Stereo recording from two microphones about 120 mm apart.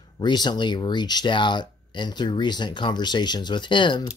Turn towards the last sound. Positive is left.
turn(degrees=40)  # may be behind; listen again after turning